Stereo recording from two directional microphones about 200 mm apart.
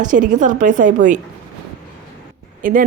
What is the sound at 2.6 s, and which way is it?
Speech, 45° right (ahead or behind).